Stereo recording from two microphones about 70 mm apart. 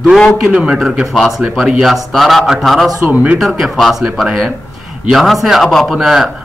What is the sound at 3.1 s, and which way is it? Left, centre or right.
Speech, right.